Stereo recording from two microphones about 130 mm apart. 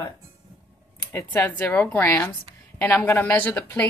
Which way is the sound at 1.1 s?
15° left (ahead or behind).